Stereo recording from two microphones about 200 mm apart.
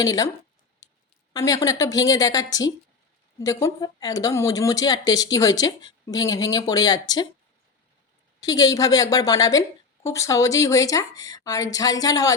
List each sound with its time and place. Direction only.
0.0 s a woman's voice: 20° left (ahead or behind)
1.3 s a woman's voice: 15° left (ahead or behind)
8.4 s a woman's voice: 20° left (ahead or behind)